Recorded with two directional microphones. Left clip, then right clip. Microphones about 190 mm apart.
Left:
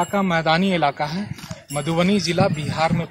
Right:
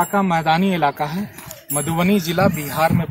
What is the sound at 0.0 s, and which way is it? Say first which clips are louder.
Speech: right 2 dB; 20° left (ahead or behind).